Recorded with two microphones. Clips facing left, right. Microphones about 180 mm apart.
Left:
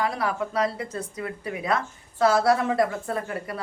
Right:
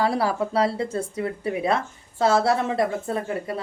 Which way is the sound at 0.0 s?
30° right (ahead or behind).